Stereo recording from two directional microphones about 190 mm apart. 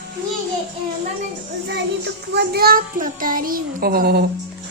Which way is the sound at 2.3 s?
60° right (ahead or behind).